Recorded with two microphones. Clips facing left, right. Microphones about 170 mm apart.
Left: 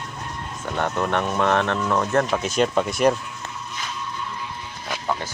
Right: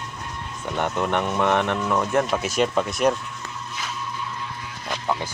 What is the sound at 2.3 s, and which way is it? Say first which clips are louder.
Speech: left 1 dB; centre (ahead or behind).